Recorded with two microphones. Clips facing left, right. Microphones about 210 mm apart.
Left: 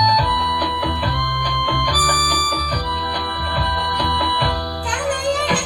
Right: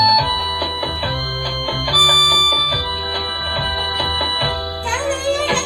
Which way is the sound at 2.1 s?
10° right (ahead or behind).